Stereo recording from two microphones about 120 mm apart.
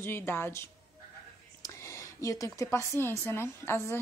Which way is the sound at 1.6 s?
25° left (ahead or behind).